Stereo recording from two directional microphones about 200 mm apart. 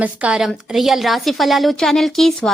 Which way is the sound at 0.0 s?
5° right (ahead or behind).